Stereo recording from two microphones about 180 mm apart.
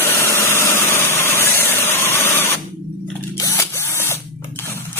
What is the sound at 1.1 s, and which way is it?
Printer, 15° left (ahead or behind).